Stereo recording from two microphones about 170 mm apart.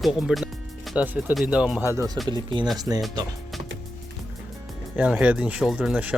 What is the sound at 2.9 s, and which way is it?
Speech, 15° right (ahead or behind).